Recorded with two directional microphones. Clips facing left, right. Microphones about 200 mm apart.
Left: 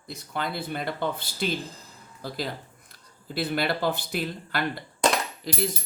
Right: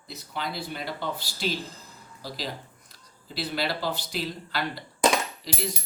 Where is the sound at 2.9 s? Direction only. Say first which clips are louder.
Left 5 dB; 55° left (ahead or behind).